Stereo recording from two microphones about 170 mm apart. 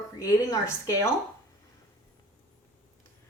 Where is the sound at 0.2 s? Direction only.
15° left (ahead or behind).